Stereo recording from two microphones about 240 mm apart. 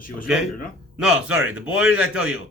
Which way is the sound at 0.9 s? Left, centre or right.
Centre.